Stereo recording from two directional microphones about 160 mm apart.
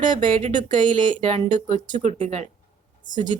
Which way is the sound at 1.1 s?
40° right (ahead or behind).